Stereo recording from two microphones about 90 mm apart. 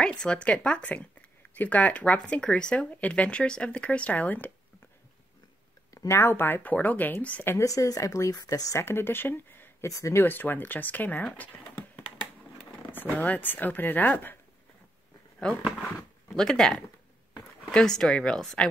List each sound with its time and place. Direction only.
0.0 s speech: 10° left (ahead or behind)
5.9 s speech: 30° left (ahead or behind)
7.5 s speech: 40° left (ahead or behind)
8.8 s speech: 25° left (ahead or behind)
9.8 s speech: 35° left (ahead or behind)
10.2 s speech: 20° left (ahead or behind)
12.9 s speech: 20° left (ahead or behind)
15.4 s speech: 10° left (ahead or behind)